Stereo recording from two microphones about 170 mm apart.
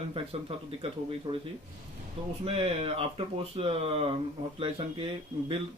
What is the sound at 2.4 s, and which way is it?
Speech, 35° right (ahead or behind).